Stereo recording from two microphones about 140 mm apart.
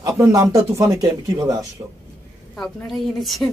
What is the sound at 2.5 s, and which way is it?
Speech, centre (ahead or behind).